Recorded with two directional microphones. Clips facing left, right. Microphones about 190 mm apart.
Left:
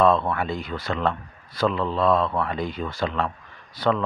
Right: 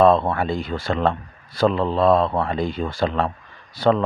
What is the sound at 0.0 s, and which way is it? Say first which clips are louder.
Speech: right 4 dB; 30° right (ahead or behind).